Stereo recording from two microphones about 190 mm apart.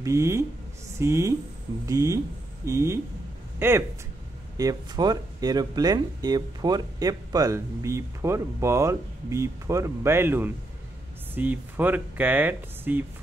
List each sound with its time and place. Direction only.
0.0 s speech: 15° right (ahead or behind)